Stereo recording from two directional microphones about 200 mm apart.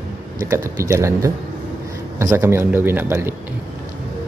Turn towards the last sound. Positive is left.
turn(degrees=-10)  # may be behind; listen again after turning